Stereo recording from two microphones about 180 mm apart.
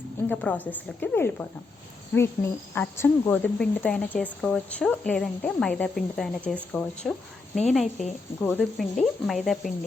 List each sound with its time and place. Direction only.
0.3 s speech: 10° left (ahead or behind)